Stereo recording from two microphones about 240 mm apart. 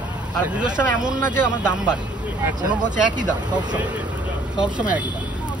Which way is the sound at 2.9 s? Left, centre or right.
Right.